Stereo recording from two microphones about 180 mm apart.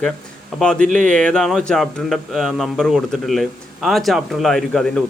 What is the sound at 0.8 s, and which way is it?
Speech, 45° right (ahead or behind).